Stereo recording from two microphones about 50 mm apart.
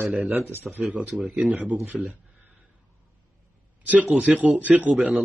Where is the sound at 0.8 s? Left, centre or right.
Centre.